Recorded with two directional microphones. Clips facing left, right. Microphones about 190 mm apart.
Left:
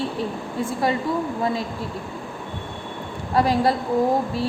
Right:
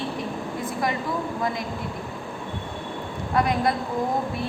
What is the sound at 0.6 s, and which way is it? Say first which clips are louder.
Speech: left 5 dB; 30° left (ahead or behind).